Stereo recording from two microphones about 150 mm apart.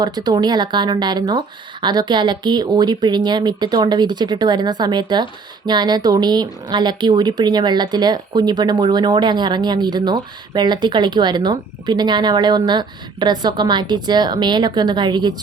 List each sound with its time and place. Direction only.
0.0 s speech: 25° right (ahead or behind)